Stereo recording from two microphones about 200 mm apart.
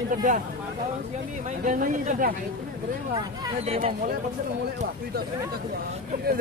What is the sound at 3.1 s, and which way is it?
Speech, 25° right (ahead or behind).